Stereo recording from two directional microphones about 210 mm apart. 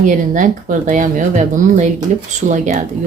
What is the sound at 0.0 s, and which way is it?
Speech, 40° right (ahead or behind).